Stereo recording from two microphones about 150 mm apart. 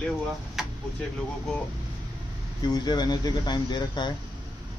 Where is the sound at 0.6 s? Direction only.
Centre (ahead or behind).